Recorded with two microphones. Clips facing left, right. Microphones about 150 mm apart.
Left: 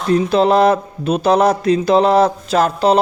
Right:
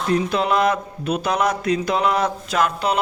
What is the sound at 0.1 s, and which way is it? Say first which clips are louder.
A man's voice: left 7 dB; 35° left (ahead or behind).